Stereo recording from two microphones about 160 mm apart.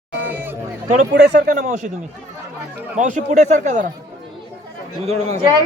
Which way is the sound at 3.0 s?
50° right (ahead or behind).